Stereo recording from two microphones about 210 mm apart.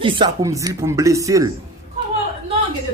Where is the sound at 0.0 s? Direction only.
25° right (ahead or behind).